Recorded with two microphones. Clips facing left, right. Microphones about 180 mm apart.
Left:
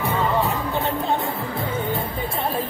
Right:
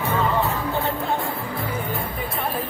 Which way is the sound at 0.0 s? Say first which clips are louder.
Even; 15° left (ahead or behind).